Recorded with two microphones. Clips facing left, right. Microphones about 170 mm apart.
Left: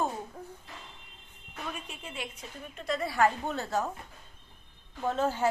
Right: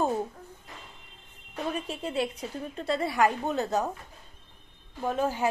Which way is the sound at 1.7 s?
35° right (ahead or behind).